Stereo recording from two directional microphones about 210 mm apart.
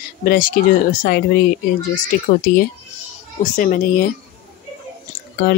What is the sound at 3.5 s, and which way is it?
Speech, 40° left (ahead or behind).